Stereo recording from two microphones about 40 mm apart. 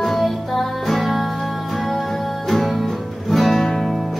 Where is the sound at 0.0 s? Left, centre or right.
Centre.